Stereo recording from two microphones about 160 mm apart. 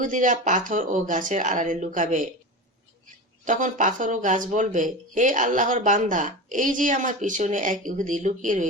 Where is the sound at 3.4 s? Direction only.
55° right (ahead or behind).